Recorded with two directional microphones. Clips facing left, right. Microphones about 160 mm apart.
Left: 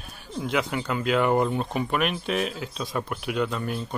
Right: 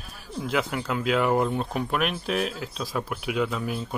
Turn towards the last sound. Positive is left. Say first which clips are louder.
# even
turn(degrees=-5)  # may be behind; listen again after turning